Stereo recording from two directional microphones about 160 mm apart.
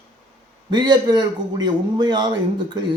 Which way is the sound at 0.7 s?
25° right (ahead or behind).